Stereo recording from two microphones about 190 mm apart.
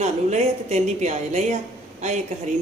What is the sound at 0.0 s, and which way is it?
A woman's voice, 35° right (ahead or behind).